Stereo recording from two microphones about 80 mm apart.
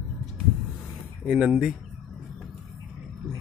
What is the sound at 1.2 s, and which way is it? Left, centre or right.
Speech, centre.